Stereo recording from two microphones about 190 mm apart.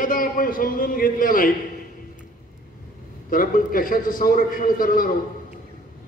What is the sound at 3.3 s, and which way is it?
A man's voice, 45° left (ahead or behind).